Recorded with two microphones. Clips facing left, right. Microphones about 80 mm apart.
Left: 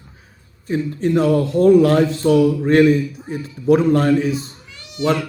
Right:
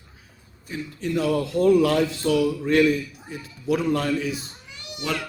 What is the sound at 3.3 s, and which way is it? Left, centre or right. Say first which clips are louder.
A man's voice: left 9 dB; left.